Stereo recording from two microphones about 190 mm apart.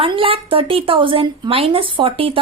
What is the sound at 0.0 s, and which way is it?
Speech, 30° right (ahead or behind).